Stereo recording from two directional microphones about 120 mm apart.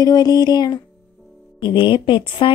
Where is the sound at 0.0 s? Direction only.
35° left (ahead or behind).